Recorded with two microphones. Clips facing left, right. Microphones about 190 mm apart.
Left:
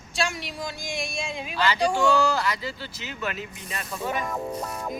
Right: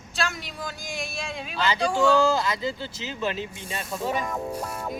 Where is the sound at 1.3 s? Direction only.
10° left (ahead or behind).